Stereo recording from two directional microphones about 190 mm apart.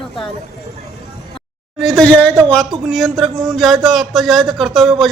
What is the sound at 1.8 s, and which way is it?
Speech, centre (ahead or behind).